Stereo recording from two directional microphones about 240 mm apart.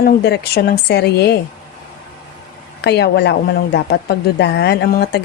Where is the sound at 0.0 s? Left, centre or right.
Left.